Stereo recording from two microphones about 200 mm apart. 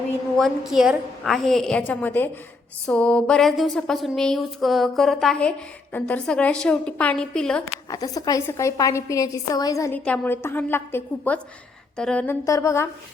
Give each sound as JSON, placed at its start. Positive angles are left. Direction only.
{"t": 0.3, "sound": "speech", "side_deg": 0}
{"t": 7.9, "sound": "a woman's voice", "side_deg": 15}